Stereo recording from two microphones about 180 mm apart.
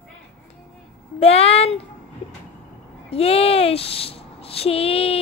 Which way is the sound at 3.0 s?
35° left (ahead or behind).